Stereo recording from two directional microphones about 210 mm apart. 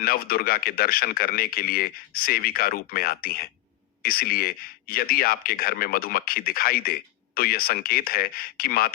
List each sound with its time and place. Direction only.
0.0 s speech: 45° left (ahead or behind)